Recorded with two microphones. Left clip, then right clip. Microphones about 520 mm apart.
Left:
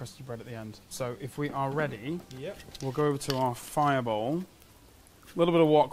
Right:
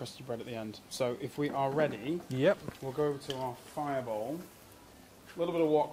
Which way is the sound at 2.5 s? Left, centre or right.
Right.